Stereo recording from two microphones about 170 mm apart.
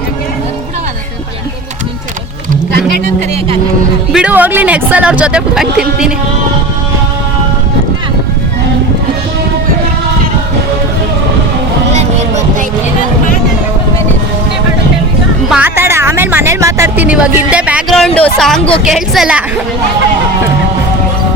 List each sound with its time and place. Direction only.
4.1 s speech: 5° right (ahead or behind)
11.9 s a sound: 40° right (ahead or behind)
15.4 s a woman's voice: 10° right (ahead or behind)